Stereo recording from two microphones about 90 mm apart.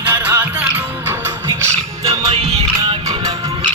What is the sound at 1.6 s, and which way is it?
Music, 35° right (ahead or behind).